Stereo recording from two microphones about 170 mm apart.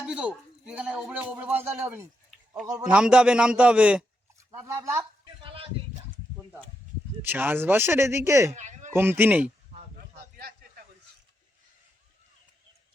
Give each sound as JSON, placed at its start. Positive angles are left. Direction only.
{"t": 0.0, "sound": "a man's voice", "side_deg": -5}
{"t": 7.2, "sound": "speech", "side_deg": -10}
{"t": 8.5, "sound": "a sound", "side_deg": -45}
{"t": 8.9, "sound": "speech", "side_deg": -15}